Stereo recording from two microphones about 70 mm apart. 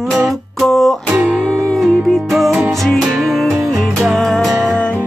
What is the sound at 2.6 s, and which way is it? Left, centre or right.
Music, centre.